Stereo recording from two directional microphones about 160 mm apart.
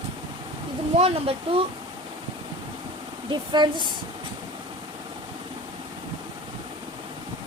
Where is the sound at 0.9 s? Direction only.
40° right (ahead or behind).